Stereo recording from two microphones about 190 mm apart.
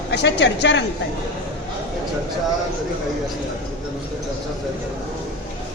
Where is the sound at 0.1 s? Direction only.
65° left (ahead or behind).